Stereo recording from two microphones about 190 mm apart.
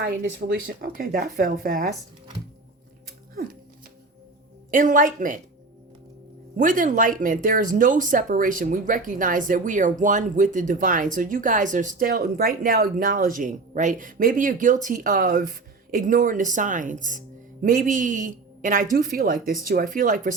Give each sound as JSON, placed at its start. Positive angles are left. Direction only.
{"t": 0.0, "sound": "speech", "side_deg": -65}
{"t": 4.7, "sound": "speech", "side_deg": -45}
{"t": 6.6, "sound": "speech", "side_deg": -45}